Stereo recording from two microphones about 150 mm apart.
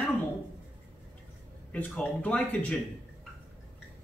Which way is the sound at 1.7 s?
10° left (ahead or behind).